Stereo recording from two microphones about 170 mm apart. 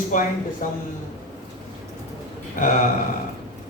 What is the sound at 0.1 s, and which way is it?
Speech, 45° left (ahead or behind).